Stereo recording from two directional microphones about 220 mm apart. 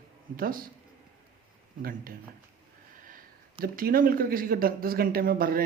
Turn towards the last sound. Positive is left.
turn(degrees=-40)  # may be behind; listen again after turning